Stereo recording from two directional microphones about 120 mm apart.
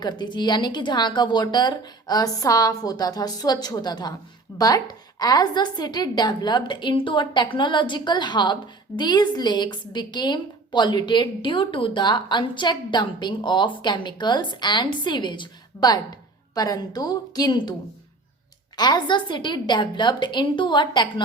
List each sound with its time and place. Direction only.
0.0 s a woman's voice: 40° left (ahead or behind)
18.8 s a woman's voice: 40° left (ahead or behind)